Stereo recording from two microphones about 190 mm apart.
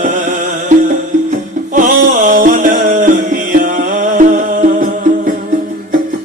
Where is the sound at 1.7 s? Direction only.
45° right (ahead or behind).